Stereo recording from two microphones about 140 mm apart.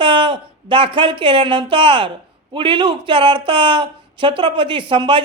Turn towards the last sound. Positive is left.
turn(degrees=-35)  # may be behind; listen again after turning